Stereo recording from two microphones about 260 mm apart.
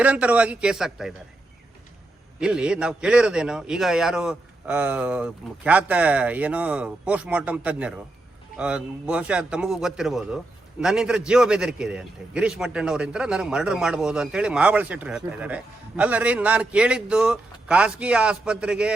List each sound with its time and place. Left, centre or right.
0.0 s a man's voice: centre
2.4 s a man's voice: centre